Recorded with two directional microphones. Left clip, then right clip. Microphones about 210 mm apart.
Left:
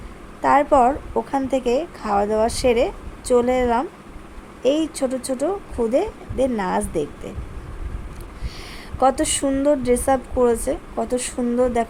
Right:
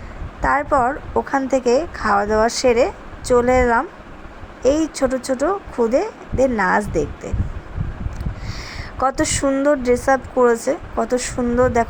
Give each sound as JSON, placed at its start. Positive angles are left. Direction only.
{"t": 0.4, "sound": "speech", "side_deg": -5}
{"t": 9.0, "sound": "a woman's voice", "side_deg": -5}